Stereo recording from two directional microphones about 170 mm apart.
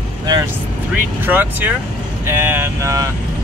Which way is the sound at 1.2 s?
10° right (ahead or behind).